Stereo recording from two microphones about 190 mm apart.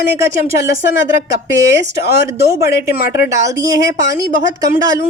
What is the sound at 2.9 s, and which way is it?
Speech, 55° left (ahead or behind).